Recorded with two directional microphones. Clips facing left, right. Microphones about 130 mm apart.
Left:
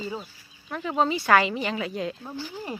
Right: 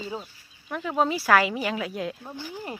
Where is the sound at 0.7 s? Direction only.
5° right (ahead or behind).